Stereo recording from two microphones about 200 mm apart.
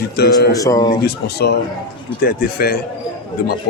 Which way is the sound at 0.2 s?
55° left (ahead or behind).